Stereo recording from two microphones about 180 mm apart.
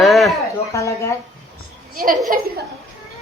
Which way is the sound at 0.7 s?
15° left (ahead or behind).